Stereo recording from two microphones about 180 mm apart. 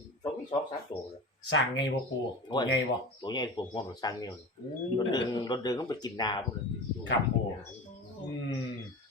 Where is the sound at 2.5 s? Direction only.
25° left (ahead or behind).